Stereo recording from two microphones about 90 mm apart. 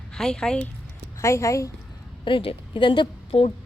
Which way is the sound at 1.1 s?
30° left (ahead or behind).